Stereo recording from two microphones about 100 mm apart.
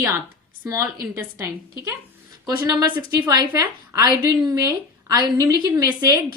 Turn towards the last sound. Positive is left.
turn(degrees=-40)  # may be behind; listen again after turning